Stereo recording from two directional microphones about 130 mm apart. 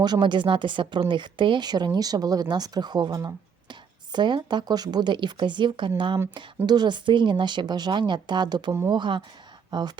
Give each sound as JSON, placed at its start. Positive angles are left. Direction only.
{"t": 0.0, "sound": "a woman's voice", "side_deg": -35}